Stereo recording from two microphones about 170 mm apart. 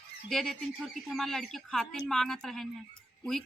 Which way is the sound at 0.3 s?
Centre (ahead or behind).